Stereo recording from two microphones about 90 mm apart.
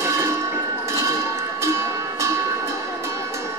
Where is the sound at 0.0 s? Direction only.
30° right (ahead or behind).